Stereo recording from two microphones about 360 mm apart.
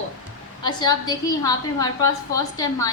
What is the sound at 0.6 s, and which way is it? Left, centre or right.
A woman's voice, centre.